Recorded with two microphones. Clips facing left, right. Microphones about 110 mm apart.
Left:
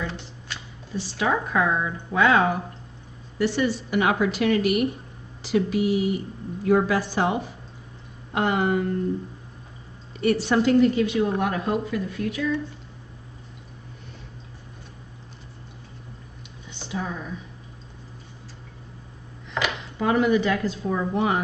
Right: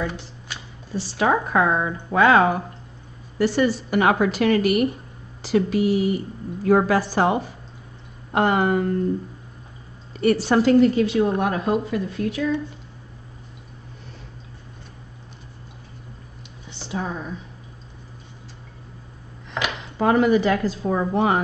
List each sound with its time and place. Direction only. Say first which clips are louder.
0.9 s a woman's voice: right 4 dB; 45° right (ahead or behind)
10.2 s a woman's voice: right 3 dB; 40° right (ahead or behind)
11.2 s speech: right 3 dB; 30° right (ahead or behind)
16.9 s a woman's voice: right 2 dB; 40° right (ahead or behind)
20.0 s a woman's voice: right 3 dB; 45° right (ahead or behind)